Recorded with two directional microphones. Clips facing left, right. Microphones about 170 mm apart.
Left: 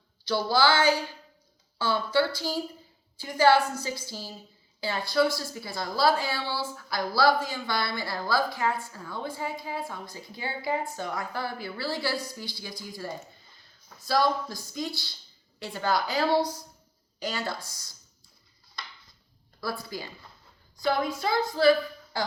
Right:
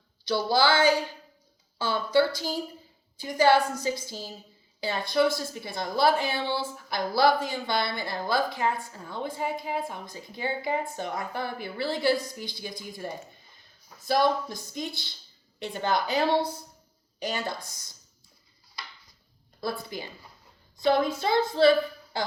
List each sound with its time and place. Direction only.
0.3 s a woman's voice: 20° right (ahead or behind)
19.6 s a woman's voice: 20° right (ahead or behind)